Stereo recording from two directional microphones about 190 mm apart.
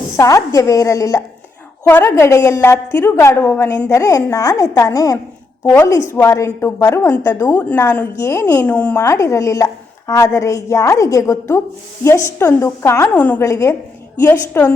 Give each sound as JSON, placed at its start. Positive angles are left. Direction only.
{"t": 0.2, "sound": "a woman's voice", "side_deg": 15}